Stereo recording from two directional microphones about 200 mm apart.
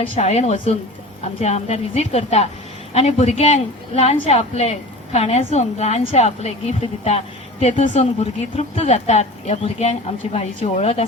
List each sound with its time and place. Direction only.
0.0 s a woman's voice: 30° left (ahead or behind)